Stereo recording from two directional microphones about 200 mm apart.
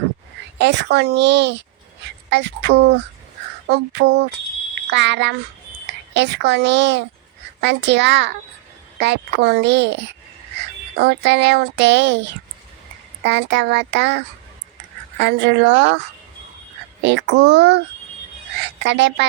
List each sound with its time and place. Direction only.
0.6 s speech: 60° right (ahead or behind)
17.0 s speech: 60° right (ahead or behind)